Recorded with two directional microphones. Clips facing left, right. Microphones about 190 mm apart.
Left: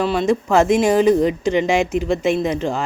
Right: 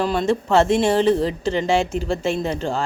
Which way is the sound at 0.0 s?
5° left (ahead or behind).